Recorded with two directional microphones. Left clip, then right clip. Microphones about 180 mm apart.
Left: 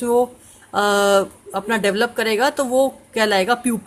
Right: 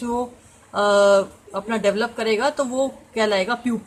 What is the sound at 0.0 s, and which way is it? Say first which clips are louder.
A woman's voice: left 8 dB; 40° left (ahead or behind).